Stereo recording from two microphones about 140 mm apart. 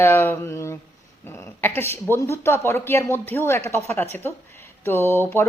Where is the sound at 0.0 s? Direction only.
15° left (ahead or behind).